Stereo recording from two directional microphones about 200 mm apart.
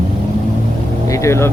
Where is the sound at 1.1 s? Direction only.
15° left (ahead or behind).